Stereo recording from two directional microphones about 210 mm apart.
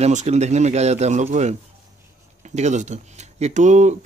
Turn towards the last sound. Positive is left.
turn(degrees=-35)  # may be behind; listen again after turning